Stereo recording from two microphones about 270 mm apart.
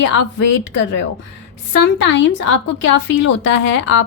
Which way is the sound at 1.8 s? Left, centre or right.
Left.